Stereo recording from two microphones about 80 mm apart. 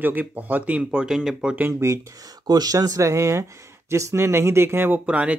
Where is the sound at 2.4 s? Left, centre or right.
Right.